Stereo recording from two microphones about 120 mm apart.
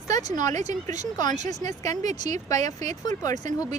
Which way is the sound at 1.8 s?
75° right (ahead or behind).